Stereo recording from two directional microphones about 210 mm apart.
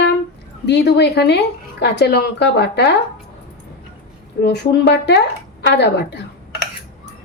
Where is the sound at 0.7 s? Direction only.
55° left (ahead or behind).